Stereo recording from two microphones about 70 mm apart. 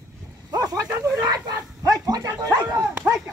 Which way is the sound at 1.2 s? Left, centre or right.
Right.